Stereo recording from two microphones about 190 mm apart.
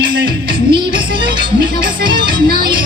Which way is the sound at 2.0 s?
25° right (ahead or behind).